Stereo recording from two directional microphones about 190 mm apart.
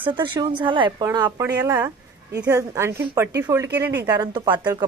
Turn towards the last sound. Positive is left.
turn(degrees=-20)  # may be behind; listen again after turning